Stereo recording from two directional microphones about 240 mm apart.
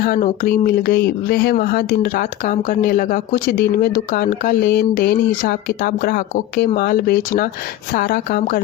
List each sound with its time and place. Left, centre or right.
0.0 s speech: left